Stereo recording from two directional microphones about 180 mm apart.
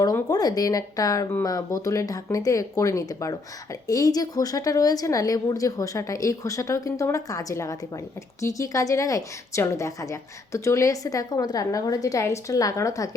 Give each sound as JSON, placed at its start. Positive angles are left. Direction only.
{"t": 0.0, "sound": "speech", "side_deg": 20}